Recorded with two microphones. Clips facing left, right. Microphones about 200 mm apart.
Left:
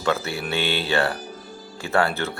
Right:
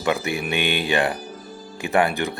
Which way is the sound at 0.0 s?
15° right (ahead or behind).